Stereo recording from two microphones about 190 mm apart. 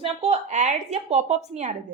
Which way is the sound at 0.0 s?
35° right (ahead or behind).